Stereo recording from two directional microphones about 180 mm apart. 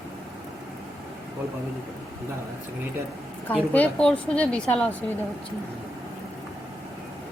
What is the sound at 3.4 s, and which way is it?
A woman's voice, 10° left (ahead or behind).